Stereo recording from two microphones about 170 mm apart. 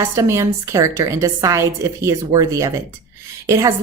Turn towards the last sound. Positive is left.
turn(degrees=-20)  # may be behind; listen again after turning